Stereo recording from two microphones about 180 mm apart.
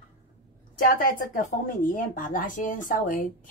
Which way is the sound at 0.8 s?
50° left (ahead or behind).